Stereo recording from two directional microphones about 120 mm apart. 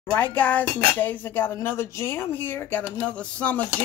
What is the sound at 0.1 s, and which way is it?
Speech, 15° left (ahead or behind).